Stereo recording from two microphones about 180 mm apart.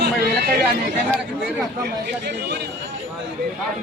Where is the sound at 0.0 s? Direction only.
60° right (ahead or behind).